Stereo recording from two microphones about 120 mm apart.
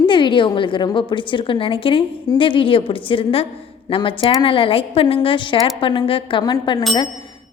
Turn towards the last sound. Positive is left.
turn(degrees=35)  # may be behind; listen again after turning